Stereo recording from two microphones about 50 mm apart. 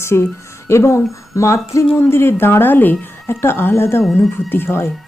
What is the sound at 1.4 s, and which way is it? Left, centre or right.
Speech, left.